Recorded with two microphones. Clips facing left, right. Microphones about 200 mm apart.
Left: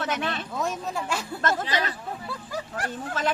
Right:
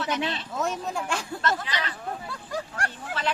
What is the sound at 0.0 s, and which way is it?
Speech, 50° left (ahead or behind).